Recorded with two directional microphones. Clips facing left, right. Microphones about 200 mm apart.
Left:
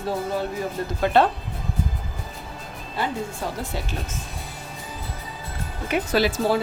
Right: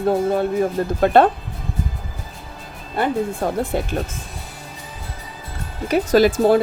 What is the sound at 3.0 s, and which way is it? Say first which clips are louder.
Speech: right 7 dB; 55° right (ahead or behind).